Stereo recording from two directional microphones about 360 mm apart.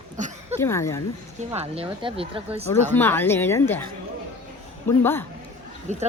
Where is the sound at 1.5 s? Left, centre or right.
Centre.